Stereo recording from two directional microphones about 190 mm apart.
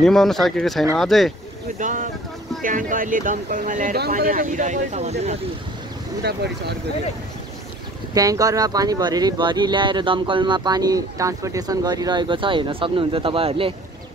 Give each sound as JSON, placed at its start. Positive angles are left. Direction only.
{"t": 0.0, "sound": "speech", "side_deg": 0}
{"t": 1.8, "sound": "speech", "side_deg": -45}
{"t": 6.2, "sound": "speech", "side_deg": -60}
{"t": 8.1, "sound": "speech", "side_deg": -20}